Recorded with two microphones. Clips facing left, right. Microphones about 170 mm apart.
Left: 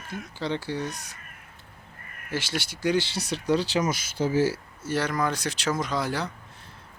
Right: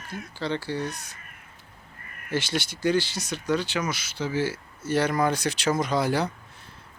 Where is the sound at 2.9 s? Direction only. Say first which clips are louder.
Even; 30° left (ahead or behind).